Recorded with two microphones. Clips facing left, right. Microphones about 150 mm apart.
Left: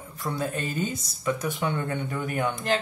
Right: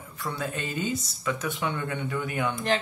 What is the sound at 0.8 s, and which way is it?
Speech, 40° left (ahead or behind).